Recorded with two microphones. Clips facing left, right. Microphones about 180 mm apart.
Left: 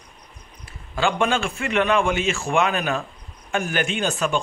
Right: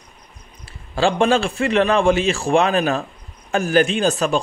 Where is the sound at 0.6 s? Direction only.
30° right (ahead or behind).